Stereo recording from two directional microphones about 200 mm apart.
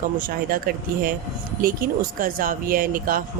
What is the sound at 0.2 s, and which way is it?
Speech, 45° right (ahead or behind).